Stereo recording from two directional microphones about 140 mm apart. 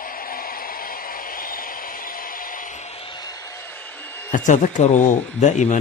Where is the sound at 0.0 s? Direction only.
90° left.